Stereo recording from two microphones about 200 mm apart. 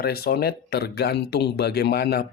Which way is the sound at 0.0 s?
50° left (ahead or behind).